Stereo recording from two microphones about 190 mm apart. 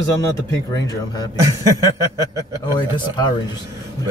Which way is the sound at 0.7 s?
20° left (ahead or behind).